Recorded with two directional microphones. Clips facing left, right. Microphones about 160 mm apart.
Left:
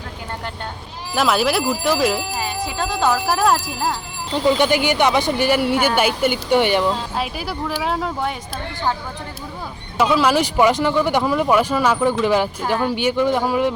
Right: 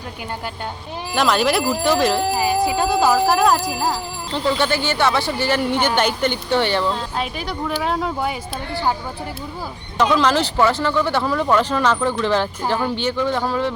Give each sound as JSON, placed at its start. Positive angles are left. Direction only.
{"t": 1.1, "sound": "speech", "side_deg": 5}
{"t": 2.4, "sound": "speech", "side_deg": -10}
{"t": 4.4, "sound": "speech", "side_deg": 15}
{"t": 7.2, "sound": "speech", "side_deg": 5}
{"t": 10.0, "sound": "speech", "side_deg": 10}